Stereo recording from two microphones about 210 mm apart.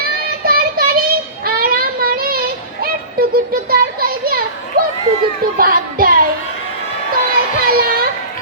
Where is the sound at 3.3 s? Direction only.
45° right (ahead or behind).